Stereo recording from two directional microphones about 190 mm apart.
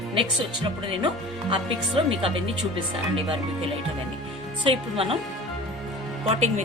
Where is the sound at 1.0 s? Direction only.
25° right (ahead or behind).